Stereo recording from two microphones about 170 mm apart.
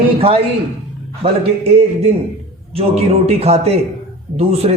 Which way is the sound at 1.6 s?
35° right (ahead or behind).